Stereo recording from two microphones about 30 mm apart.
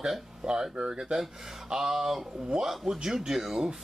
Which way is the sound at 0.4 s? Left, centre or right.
Right.